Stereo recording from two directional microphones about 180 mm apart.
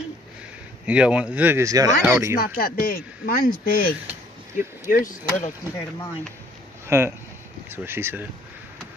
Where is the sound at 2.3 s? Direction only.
55° left (ahead or behind).